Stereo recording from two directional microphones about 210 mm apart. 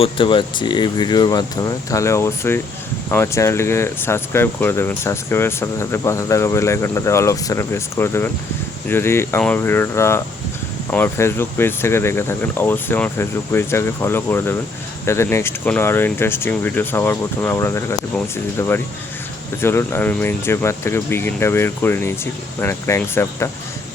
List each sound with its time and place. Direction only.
0.0 s speech: 25° left (ahead or behind)